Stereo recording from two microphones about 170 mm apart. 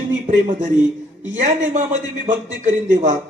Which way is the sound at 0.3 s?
45° right (ahead or behind).